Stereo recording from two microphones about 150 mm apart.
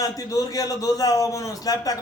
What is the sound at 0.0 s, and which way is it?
A man's voice, 20° left (ahead or behind).